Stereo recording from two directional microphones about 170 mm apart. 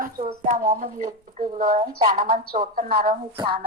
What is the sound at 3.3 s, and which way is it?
Speech, 30° right (ahead or behind).